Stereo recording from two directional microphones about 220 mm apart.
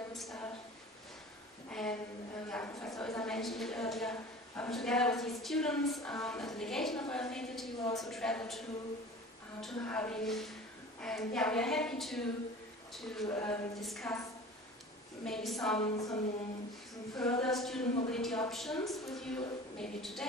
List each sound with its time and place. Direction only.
0.1 s a sound: centre (ahead or behind)
1.7 s a sound: 5° left (ahead or behind)
7.8 s speech: 15° left (ahead or behind)
8.1 s a woman's voice: 5° left (ahead or behind)
15.2 s a woman's voice: centre (ahead or behind)
15.8 s speech: 15° left (ahead or behind)
17.1 s a woman's voice: centre (ahead or behind)